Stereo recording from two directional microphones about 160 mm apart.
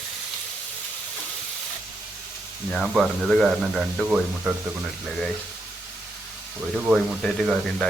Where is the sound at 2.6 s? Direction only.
Centre (ahead or behind).